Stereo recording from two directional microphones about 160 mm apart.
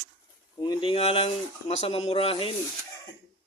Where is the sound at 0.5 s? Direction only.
25° left (ahead or behind).